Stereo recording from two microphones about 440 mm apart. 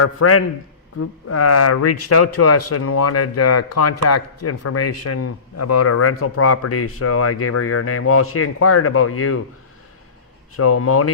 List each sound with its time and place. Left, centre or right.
0.0 s speech: left
10.6 s speech: left